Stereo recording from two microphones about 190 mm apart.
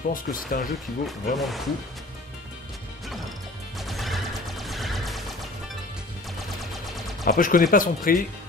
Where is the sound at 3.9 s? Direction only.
Centre (ahead or behind).